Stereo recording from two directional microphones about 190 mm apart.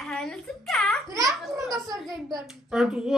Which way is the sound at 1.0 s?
20° right (ahead or behind).